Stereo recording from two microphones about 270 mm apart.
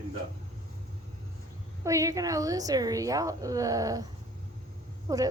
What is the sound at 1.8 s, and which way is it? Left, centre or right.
A woman's voice, centre.